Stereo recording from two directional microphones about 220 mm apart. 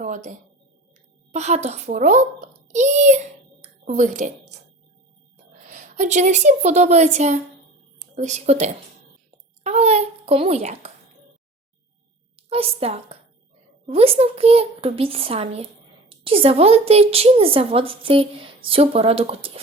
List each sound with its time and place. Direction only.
0.0 s a woman's voice: 35° right (ahead or behind)
5.6 s a woman's voice: 35° right (ahead or behind)
9.6 s a sound: 30° right (ahead or behind)
12.4 s a woman's voice: 25° right (ahead or behind)